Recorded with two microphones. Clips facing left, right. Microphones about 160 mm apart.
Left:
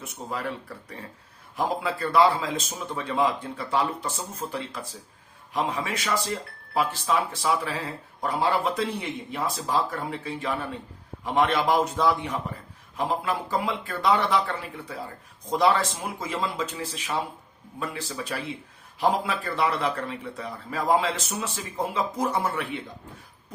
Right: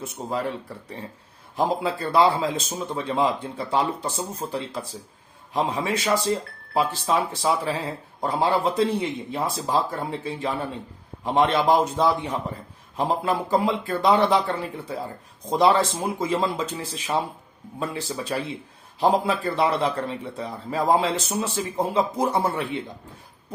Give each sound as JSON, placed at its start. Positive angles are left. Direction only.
{"t": 0.0, "sound": "speech", "side_deg": -30}
{"t": 1.5, "sound": "speech", "side_deg": -30}